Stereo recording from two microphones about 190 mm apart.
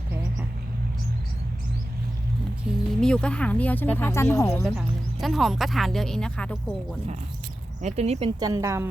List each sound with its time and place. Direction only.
2.6 s speech: 5° left (ahead or behind)
5.2 s speech: centre (ahead or behind)
7.8 s speech: 35° right (ahead or behind)
8.4 s a woman's voice: 20° right (ahead or behind)